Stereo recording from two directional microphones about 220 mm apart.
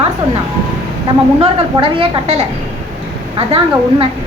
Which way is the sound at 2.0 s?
30° right (ahead or behind).